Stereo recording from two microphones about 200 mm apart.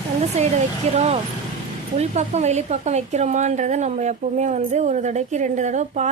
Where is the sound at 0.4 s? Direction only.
35° right (ahead or behind).